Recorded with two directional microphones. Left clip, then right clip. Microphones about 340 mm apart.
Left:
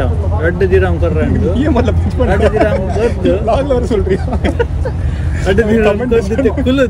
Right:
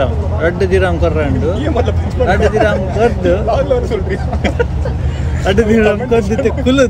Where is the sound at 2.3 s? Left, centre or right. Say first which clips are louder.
Even; centre.